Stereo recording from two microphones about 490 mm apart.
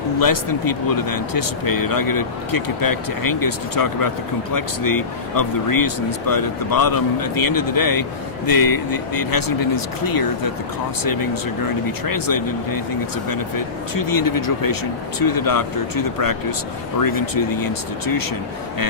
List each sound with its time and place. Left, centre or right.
0.2 s speech: left
13.9 s speech: left